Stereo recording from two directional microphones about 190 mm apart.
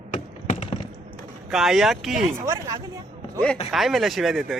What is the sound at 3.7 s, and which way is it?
Speech, centre (ahead or behind).